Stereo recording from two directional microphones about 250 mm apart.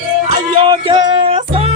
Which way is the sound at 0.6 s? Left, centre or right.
Centre.